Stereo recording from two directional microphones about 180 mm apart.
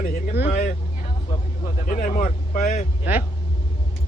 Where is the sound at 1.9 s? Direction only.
45° left (ahead or behind).